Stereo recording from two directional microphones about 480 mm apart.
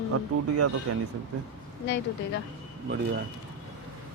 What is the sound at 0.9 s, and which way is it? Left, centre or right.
Speech, right.